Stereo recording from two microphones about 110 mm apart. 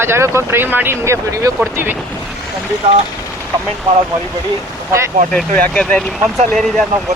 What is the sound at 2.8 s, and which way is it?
Speech, 65° right (ahead or behind).